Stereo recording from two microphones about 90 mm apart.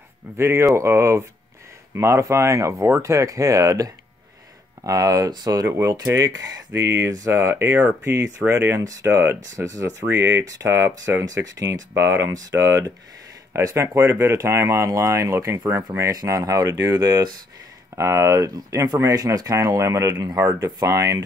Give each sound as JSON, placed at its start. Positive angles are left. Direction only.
{"t": 0.4, "sound": "speech", "side_deg": -30}
{"t": 11.9, "sound": "speech", "side_deg": -30}